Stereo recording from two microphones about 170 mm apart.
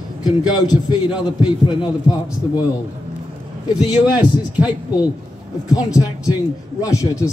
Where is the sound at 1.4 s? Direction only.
25° left (ahead or behind).